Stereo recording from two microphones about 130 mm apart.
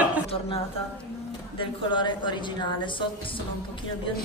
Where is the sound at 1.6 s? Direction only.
35° left (ahead or behind).